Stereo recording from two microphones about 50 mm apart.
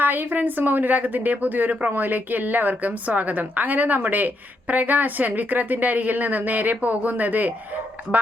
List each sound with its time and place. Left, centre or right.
0.0 s a woman's voice: right